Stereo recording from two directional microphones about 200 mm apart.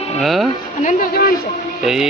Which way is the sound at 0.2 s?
Centre (ahead or behind).